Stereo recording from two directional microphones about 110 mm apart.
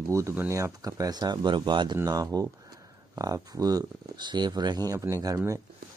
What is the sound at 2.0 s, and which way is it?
Speech, 35° right (ahead or behind).